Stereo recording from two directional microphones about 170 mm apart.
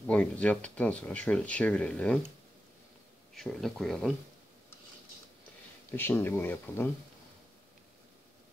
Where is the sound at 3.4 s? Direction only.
5° left (ahead or behind).